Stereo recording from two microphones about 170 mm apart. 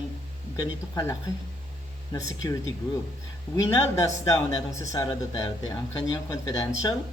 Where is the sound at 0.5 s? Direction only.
20° left (ahead or behind).